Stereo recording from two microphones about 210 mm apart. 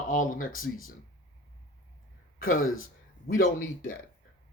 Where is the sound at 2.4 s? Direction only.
40° left (ahead or behind).